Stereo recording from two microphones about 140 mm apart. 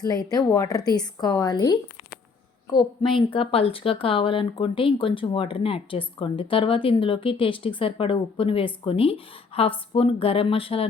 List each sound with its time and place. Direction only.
0.0 s a woman's voice: 30° left (ahead or behind); by 10.8 s 45° left (ahead or behind)